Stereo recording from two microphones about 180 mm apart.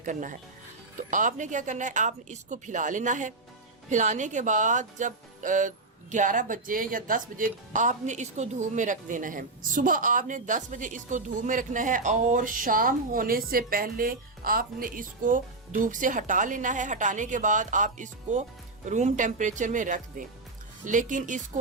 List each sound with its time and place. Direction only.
0.0 s speech: 45° right (ahead or behind)